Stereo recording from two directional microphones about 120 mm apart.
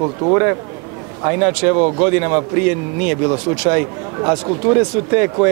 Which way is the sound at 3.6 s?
25° right (ahead or behind).